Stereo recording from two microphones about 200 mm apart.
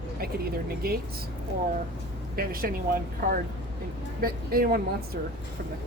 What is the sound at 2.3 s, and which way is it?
Speech, 50° right (ahead or behind).